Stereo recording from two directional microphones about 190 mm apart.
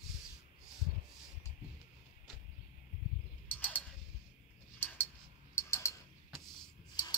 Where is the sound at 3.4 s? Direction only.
10° left (ahead or behind).